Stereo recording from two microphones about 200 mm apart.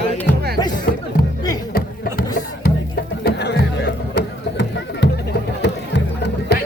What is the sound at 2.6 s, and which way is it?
Music, 50° left (ahead or behind).